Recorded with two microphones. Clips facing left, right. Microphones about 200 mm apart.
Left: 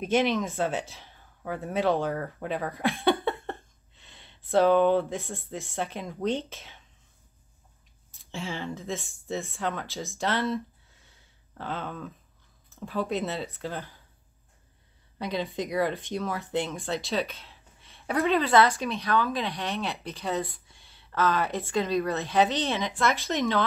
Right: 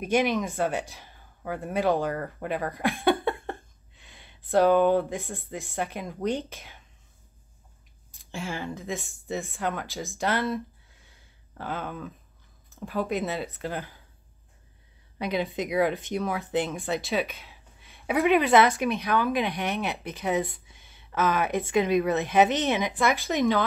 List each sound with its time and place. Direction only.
0.0 s a woman's voice: 15° right (ahead or behind)
2.0 s speech: centre (ahead or behind)
2.9 s a sound: centre (ahead or behind)
4.5 s speech: 5° right (ahead or behind)
8.4 s a woman's voice: 10° right (ahead or behind)
8.9 s speech: centre (ahead or behind)
11.5 s a woman's voice: 5° right (ahead or behind)
15.1 s a woman's voice: 15° right (ahead or behind)